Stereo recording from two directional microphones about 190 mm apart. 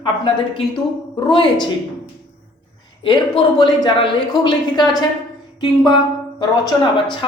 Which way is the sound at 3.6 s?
25° left (ahead or behind).